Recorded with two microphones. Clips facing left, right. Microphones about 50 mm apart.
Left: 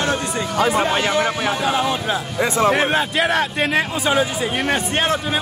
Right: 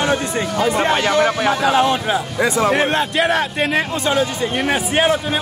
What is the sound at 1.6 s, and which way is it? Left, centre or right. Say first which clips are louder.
Speech: right 5 dB; right.